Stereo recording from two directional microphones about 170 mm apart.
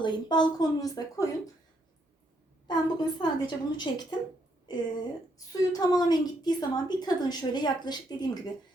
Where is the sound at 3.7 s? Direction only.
25° left (ahead or behind).